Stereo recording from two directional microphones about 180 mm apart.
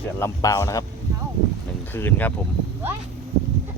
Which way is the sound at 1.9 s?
10° left (ahead or behind).